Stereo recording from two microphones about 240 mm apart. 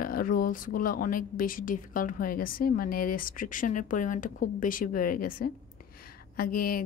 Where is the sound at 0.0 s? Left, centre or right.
Left.